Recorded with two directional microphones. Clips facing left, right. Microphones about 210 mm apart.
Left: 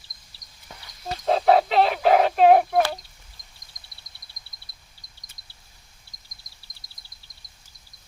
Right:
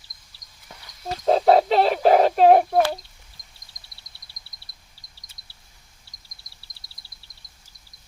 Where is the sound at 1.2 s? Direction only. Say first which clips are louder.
Right 2 dB; 35° right (ahead or behind).